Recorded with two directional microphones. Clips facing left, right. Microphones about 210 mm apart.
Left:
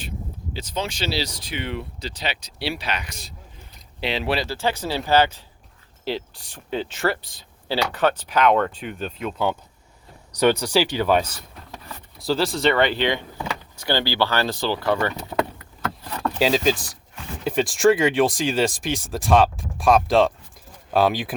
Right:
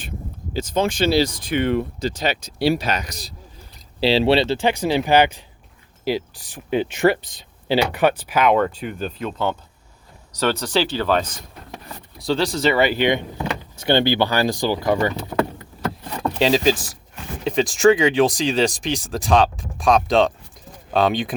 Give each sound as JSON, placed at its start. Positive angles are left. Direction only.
{"t": 0.5, "sound": "speech", "side_deg": -50}
{"t": 10.4, "sound": "speech", "side_deg": 10}
{"t": 16.4, "sound": "speech", "side_deg": 0}